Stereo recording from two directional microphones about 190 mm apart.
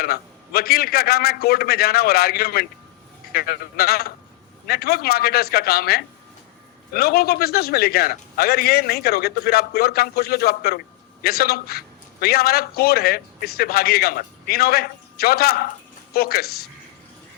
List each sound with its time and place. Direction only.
0.0 s a man's voice: 55° left (ahead or behind)